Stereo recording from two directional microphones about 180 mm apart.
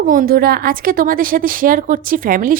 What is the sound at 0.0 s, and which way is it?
A woman's voice, 50° right (ahead or behind).